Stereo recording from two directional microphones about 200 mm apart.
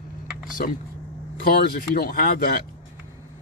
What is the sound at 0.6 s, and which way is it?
Speech, 45° left (ahead or behind).